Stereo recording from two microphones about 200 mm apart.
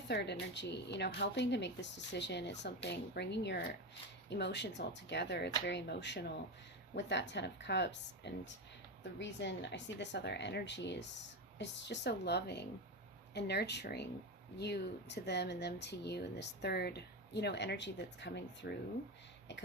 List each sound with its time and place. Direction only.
0.1 s speech: 55° left (ahead or behind)